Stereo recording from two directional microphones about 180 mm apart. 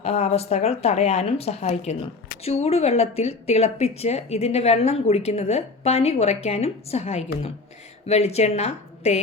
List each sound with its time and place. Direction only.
0.0 s a woman's voice: 35° left (ahead or behind)